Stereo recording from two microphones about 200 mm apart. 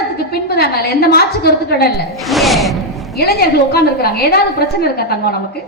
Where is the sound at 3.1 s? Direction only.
50° left (ahead or behind).